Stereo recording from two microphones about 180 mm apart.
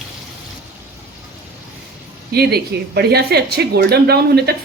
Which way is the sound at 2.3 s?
60° right (ahead or behind).